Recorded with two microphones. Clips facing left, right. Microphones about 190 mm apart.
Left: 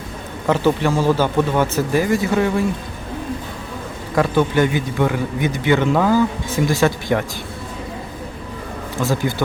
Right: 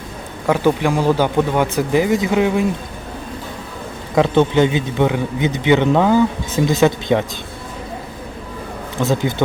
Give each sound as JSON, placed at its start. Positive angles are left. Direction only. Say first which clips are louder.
{"t": 0.4, "sound": "speech", "louder": "right 1 dB", "side_deg": -15}
{"t": 4.1, "sound": "a man's voice", "louder": "right 3 dB", "side_deg": -20}
{"t": 9.0, "sound": "a man's voice", "louder": "right 2 dB", "side_deg": -20}